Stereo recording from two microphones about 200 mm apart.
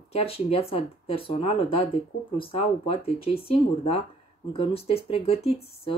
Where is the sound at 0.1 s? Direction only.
30° left (ahead or behind).